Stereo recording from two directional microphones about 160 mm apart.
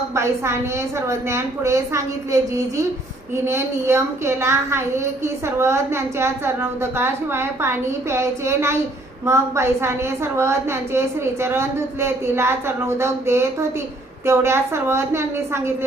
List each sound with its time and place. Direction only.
0.1 s a woman's voice: 15° right (ahead or behind)